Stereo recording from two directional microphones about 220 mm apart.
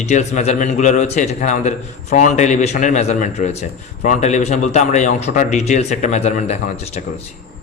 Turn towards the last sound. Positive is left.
turn(degrees=30)  # may be behind; listen again after turning